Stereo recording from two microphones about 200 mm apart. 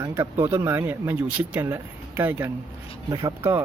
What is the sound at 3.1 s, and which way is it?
Speech, 20° right (ahead or behind).